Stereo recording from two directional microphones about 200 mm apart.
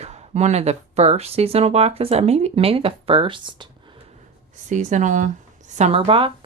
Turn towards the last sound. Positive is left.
turn(degrees=-25)  # may be behind; listen again after turning